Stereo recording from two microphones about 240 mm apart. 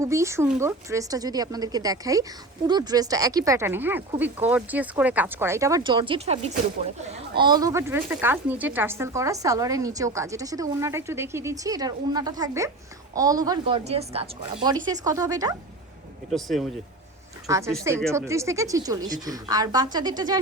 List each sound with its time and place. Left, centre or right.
0.0 s speech: centre
16.3 s speech: centre
17.4 s speech: centre